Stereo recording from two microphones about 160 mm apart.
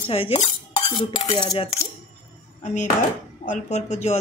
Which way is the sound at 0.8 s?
25° left (ahead or behind).